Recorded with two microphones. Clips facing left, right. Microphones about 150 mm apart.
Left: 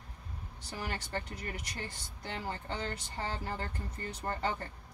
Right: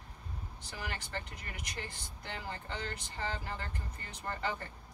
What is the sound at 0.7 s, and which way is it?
Speech, 35° left (ahead or behind).